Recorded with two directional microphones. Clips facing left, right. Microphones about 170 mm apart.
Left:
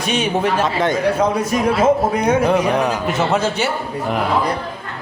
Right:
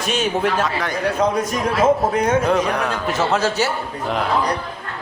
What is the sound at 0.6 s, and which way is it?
Speech, 25° left (ahead or behind).